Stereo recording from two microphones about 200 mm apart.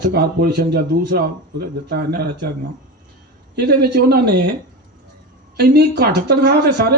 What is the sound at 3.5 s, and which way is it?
Speech, 55° right (ahead or behind).